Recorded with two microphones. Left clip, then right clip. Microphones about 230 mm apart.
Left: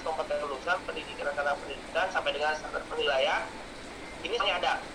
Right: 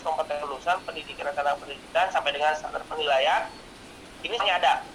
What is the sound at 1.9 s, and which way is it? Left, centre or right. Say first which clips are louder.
Speech: right 5 dB; right.